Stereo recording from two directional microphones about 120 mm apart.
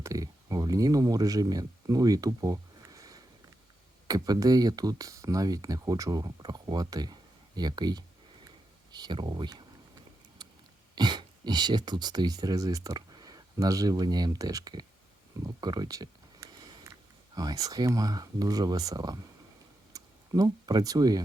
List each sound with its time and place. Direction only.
0.0 s speech: 30° right (ahead or behind)
10.4 s a sound: 35° right (ahead or behind)
10.9 s speech: 40° right (ahead or behind)